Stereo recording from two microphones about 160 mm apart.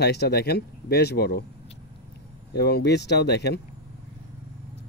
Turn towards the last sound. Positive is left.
turn(degrees=90)